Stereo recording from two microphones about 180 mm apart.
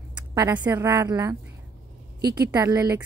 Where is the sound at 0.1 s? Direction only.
20° right (ahead or behind).